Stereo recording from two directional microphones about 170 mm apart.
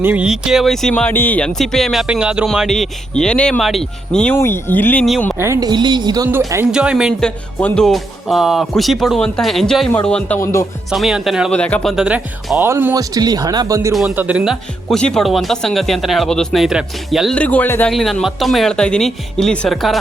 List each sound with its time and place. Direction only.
0.0 s speech: 10° right (ahead or behind); by 5.0 s 10° left (ahead or behind)
5.4 s a woman's voice: 20° right (ahead or behind)
6.7 s speech: 5° right (ahead or behind); by 10.7 s 20° left (ahead or behind)
10.9 s speech: centre (ahead or behind); by 13.9 s 20° right (ahead or behind)
13.9 s speech: 5° right (ahead or behind)